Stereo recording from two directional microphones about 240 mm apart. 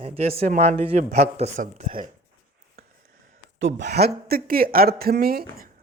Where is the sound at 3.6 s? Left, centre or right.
Right.